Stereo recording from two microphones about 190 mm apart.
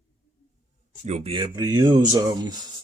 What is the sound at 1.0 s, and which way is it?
Speech, 35° right (ahead or behind).